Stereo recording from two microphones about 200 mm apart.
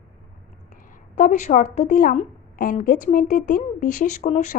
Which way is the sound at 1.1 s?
40° left (ahead or behind).